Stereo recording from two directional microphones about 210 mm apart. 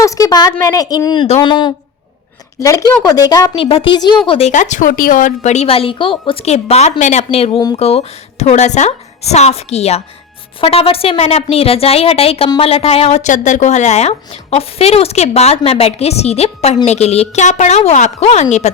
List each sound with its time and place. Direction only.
0.0 s a woman's voice: 15° left (ahead or behind); by 18.7 s 35° left (ahead or behind)